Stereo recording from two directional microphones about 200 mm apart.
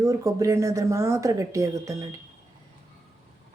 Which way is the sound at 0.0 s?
15° right (ahead or behind).